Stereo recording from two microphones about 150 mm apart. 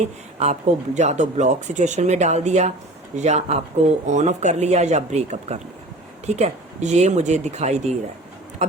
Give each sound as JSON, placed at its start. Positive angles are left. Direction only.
{"t": 0.3, "sound": "speech", "side_deg": -50}